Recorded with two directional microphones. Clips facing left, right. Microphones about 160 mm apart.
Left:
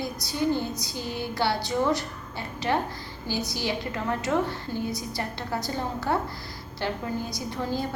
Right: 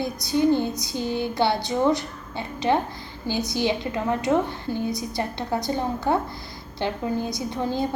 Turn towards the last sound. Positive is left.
turn(degrees=-20)  # may be behind; listen again after turning